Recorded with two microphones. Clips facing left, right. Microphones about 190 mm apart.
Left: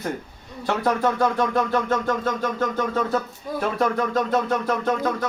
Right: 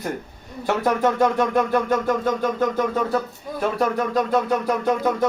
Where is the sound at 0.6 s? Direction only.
20° right (ahead or behind).